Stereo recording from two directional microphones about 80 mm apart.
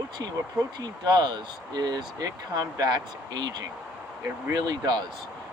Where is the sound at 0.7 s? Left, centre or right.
Right.